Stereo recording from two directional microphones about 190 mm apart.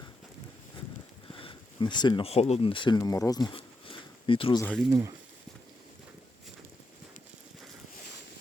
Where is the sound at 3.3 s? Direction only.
25° left (ahead or behind).